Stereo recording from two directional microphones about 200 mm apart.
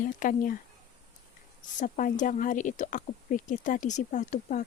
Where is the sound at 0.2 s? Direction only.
40° left (ahead or behind).